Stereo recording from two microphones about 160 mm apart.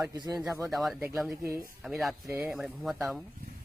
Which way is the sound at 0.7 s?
Centre (ahead or behind).